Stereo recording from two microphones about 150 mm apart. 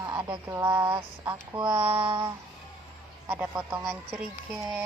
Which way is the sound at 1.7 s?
10° right (ahead or behind).